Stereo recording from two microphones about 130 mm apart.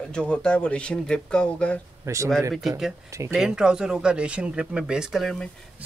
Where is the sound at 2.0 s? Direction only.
25° right (ahead or behind).